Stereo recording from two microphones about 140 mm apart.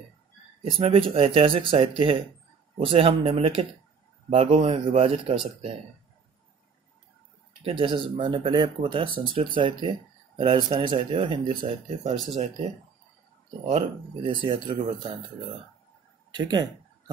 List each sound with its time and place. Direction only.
0.7 s speech: 40° right (ahead or behind)
7.6 s speech: 35° right (ahead or behind)
13.7 s speech: 40° right (ahead or behind)
16.3 s speech: 30° right (ahead or behind)